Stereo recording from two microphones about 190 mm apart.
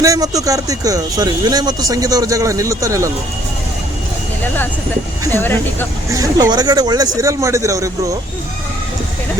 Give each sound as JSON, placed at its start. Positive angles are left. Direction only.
{"t": 0.0, "sound": "speech", "side_deg": -20}
{"t": 5.3, "sound": "speech", "side_deg": 10}
{"t": 6.1, "sound": "speech", "side_deg": -20}